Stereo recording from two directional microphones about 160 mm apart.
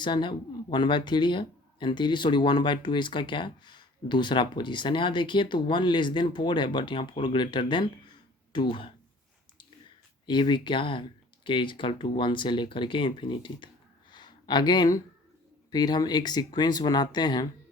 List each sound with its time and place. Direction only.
0.0 s speech: 30° left (ahead or behind)
10.2 s speech: 30° left (ahead or behind)
14.1 s a sound: 30° left (ahead or behind)
15.7 s speech: 25° left (ahead or behind)